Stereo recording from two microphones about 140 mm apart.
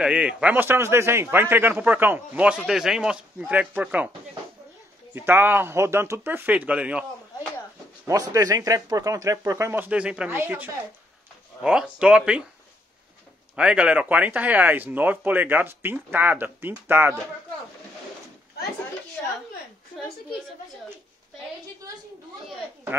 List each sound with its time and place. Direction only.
0.0 s a man's voice: 5° right (ahead or behind)
5.1 s a man's voice: 15° right (ahead or behind)
8.1 s a man's voice: 25° right (ahead or behind); by 12.4 s 5° right (ahead or behind)
13.6 s a man's voice: 5° right (ahead or behind)
19.2 s a sound: 10° left (ahead or behind)